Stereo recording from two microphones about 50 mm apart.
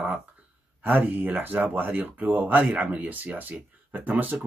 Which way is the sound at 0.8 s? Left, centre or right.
Right.